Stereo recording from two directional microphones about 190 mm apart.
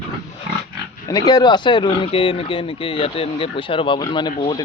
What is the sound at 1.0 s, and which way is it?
Speech, 20° left (ahead or behind).